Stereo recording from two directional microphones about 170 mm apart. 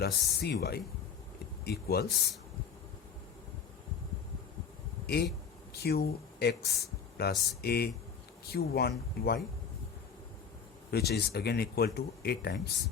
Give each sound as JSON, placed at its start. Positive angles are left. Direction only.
{"t": 0.0, "sound": "speech", "side_deg": 70}
{"t": 5.0, "sound": "speech", "side_deg": 65}
{"t": 10.9, "sound": "speech", "side_deg": 70}